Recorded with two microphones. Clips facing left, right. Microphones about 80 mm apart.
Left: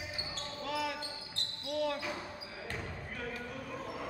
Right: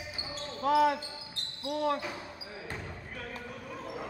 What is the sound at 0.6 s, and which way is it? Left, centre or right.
Speech, right.